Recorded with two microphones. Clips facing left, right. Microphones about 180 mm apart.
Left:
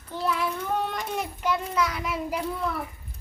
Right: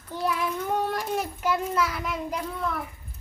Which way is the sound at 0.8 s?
5° right (ahead or behind).